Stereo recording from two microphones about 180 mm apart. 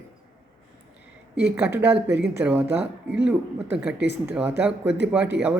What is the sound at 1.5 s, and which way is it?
Speech, 10° right (ahead or behind).